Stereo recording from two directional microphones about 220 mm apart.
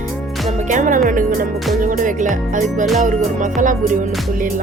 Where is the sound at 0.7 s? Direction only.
35° right (ahead or behind).